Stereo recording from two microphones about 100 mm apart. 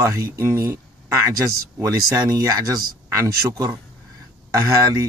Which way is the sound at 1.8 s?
35° right (ahead or behind).